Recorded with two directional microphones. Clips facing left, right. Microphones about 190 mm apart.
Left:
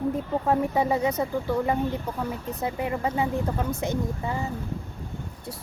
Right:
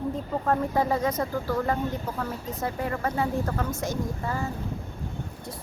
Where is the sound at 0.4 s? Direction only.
10° left (ahead or behind).